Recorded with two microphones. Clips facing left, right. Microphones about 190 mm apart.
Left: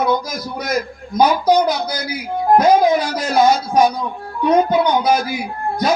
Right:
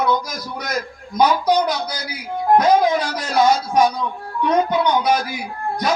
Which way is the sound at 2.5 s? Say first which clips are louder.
Left 2 dB; 25° left (ahead or behind).